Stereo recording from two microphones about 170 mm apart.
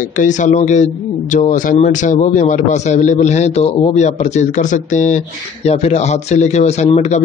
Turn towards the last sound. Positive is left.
turn(degrees=40)  # may be behind; listen again after turning